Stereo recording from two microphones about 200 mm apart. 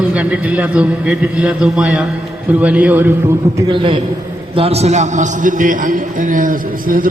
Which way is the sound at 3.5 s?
25° right (ahead or behind).